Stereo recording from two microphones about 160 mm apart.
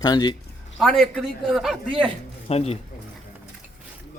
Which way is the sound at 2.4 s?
40° left (ahead or behind).